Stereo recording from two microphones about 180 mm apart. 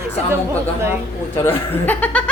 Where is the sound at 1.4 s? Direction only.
10° left (ahead or behind).